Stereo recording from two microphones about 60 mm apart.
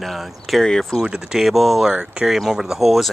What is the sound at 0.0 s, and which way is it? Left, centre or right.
Speech, centre.